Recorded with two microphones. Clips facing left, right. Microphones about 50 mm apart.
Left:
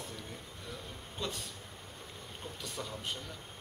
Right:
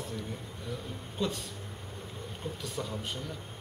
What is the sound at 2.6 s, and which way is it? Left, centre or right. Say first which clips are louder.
Speech: right 3 dB; centre.